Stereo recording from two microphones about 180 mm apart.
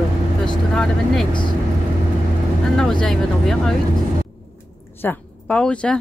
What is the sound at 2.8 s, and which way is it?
Speech, centre (ahead or behind).